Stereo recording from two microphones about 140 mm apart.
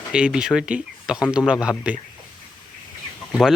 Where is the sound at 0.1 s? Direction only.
5° right (ahead or behind).